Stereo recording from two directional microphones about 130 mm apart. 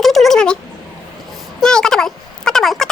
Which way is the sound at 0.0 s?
Centre (ahead or behind).